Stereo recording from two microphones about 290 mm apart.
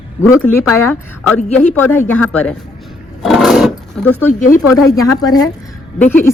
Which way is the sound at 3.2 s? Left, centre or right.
Centre.